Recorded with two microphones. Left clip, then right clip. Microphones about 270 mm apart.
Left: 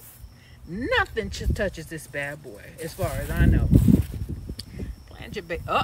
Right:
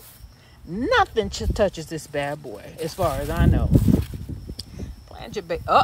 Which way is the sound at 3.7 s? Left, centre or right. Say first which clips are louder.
Left 3 dB; centre.